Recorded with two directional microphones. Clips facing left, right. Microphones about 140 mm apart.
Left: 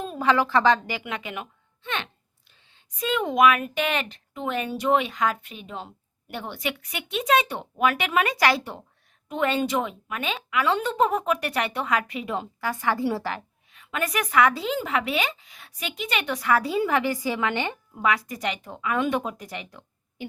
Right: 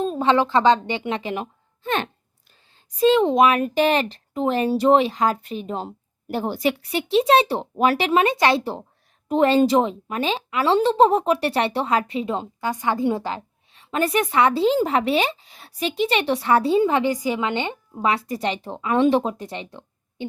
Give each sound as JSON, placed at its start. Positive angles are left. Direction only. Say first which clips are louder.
{"t": 0.0, "sound": "a woman's voice", "louder": "right 4 dB", "side_deg": -25}